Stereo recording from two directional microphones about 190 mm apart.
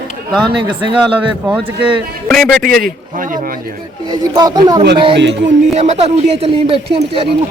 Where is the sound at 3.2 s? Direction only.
45° right (ahead or behind).